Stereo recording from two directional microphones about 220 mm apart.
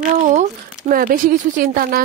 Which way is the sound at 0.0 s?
35° right (ahead or behind).